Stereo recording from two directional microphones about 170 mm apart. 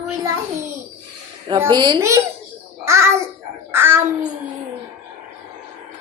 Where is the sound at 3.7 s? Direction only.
15° right (ahead or behind).